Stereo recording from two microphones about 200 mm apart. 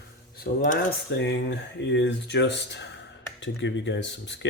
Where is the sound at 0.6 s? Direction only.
40° left (ahead or behind).